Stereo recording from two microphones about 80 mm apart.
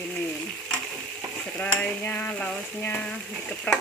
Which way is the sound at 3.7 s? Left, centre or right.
Centre.